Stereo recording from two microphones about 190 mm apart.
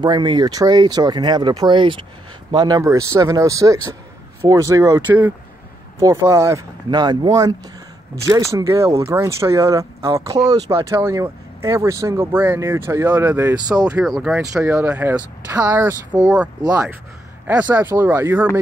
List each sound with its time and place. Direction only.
0.0 s speech: 25° right (ahead or behind)
13.8 s speech: 5° right (ahead or behind)
14.4 s speech: 15° right (ahead or behind)